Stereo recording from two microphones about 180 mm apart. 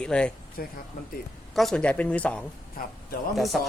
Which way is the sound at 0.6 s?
60° left (ahead or behind).